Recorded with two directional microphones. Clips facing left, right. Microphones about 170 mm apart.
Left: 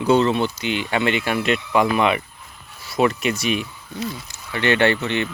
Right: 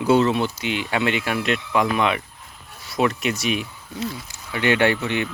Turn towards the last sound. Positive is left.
turn(degrees=-10)  # may be behind; listen again after turning